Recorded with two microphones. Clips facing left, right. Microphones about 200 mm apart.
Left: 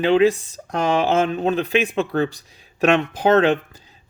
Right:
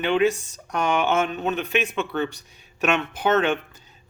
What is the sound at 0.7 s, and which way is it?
Speech, 90° left.